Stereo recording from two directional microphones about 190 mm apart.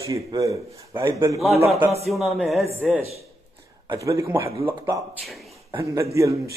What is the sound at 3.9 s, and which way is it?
Speech, 15° right (ahead or behind).